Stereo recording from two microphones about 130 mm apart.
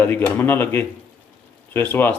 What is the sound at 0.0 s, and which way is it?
Speech, 15° left (ahead or behind).